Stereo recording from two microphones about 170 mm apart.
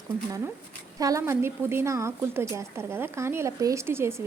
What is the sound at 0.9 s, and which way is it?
Speech, 20° right (ahead or behind).